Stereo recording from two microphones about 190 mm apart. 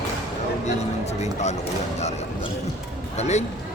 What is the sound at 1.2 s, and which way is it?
Speech, 35° left (ahead or behind).